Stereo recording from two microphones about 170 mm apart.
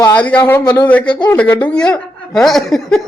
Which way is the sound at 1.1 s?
25° left (ahead or behind).